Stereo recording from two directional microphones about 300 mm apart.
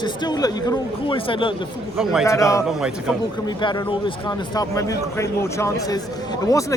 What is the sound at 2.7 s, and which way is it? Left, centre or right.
Speech, centre.